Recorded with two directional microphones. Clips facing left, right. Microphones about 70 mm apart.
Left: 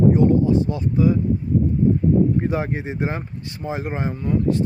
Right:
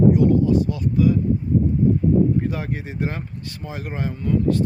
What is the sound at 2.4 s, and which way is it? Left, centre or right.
Speech, left.